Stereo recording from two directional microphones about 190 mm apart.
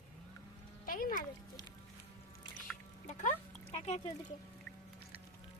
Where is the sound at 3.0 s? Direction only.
40° left (ahead or behind).